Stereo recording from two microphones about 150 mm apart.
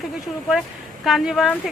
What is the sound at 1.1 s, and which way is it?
Speech, centre (ahead or behind).